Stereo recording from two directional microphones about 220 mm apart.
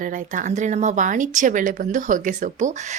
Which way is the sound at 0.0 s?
35° right (ahead or behind).